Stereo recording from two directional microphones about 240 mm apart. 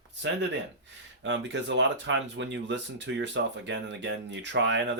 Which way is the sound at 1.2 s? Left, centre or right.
Right.